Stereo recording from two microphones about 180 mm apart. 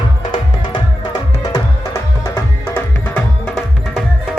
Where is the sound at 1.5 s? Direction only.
15° left (ahead or behind).